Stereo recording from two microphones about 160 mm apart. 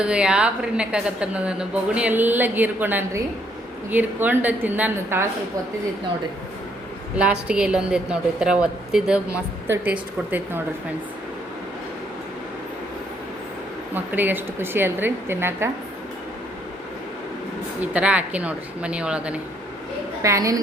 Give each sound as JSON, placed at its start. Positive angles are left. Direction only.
{"t": 0.0, "sound": "a woman's voice", "side_deg": -5}
{"t": 7.2, "sound": "a woman's voice", "side_deg": -5}
{"t": 13.9, "sound": "a woman's voice", "side_deg": -10}
{"t": 17.7, "sound": "a woman's voice", "side_deg": -10}
{"t": 20.2, "sound": "a woman's voice", "side_deg": -20}